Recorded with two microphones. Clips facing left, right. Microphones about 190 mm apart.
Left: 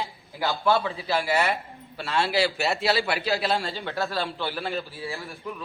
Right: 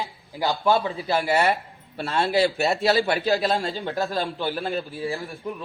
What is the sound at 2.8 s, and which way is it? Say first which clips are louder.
Speech: right 5 dB; 45° right (ahead or behind).